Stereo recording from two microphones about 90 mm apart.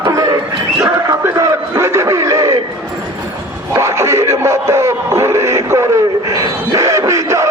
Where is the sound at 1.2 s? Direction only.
30° right (ahead or behind).